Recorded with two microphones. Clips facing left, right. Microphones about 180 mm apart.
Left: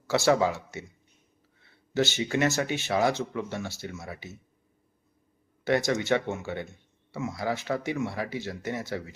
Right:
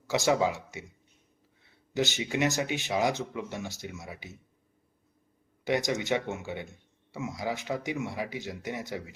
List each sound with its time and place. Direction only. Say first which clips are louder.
0.1 s speech: left 3 dB; 15° right (ahead or behind)
1.9 s speech: left 3 dB; 15° right (ahead or behind)
5.6 s speech: left 3 dB; 15° right (ahead or behind)